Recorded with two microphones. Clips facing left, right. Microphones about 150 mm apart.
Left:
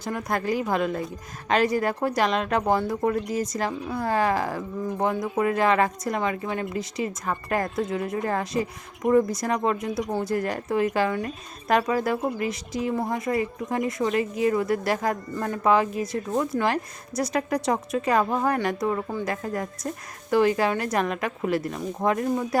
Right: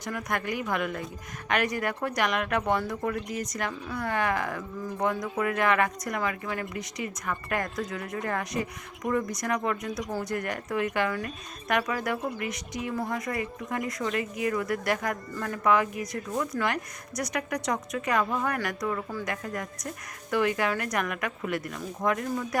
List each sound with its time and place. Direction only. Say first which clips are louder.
0.0 s speech: left 4 dB; 25° left (ahead or behind)